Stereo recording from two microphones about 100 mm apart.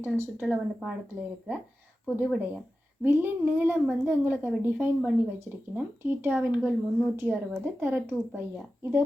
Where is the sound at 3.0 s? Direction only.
20° right (ahead or behind).